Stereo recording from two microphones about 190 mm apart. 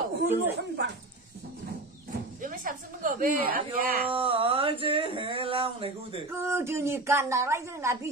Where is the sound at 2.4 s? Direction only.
45° right (ahead or behind).